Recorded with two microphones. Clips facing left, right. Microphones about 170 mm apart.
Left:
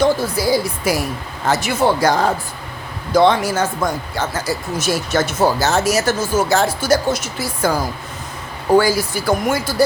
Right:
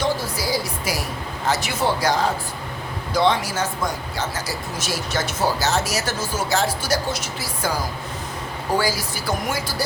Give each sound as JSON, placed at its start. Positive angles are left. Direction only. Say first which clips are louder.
{"t": 0.0, "sound": "speech", "louder": "left 7 dB", "side_deg": 55}
{"t": 8.8, "sound": "speech", "louder": "left 6 dB", "side_deg": 55}